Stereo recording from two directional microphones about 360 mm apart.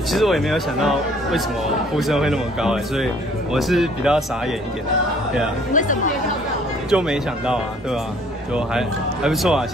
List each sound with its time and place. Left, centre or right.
0.1 s speech: centre
5.7 s speech: left
6.9 s speech: centre